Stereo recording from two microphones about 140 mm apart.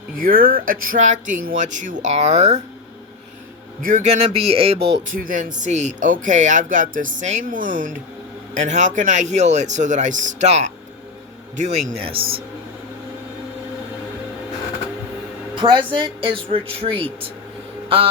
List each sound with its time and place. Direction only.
0.2 s speech: 90° right; by 2.6 s 50° right (ahead or behind)
3.8 s speech: 70° right (ahead or behind)
4.4 s speech: 45° right (ahead or behind)
5.0 s speech: 75° right (ahead or behind)
5.5 s speech: 55° right (ahead or behind)
11.9 s speech: 40° right (ahead or behind)
15.5 s speech: 35° right (ahead or behind)
17.8 s a sound: 40° right (ahead or behind)